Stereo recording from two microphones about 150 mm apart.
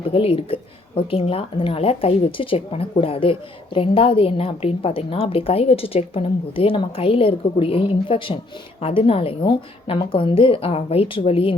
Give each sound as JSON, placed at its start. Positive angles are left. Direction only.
{"t": 0.1, "sound": "a woman's voice", "side_deg": 40}